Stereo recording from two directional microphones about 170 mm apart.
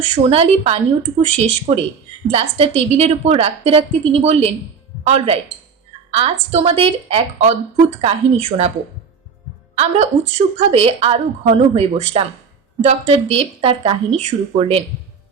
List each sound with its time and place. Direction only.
0.1 s a woman's voice: 40° right (ahead or behind)
9.7 s a woman's voice: 40° right (ahead or behind)